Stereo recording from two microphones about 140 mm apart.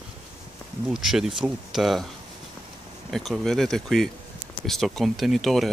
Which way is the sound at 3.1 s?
Centre (ahead or behind).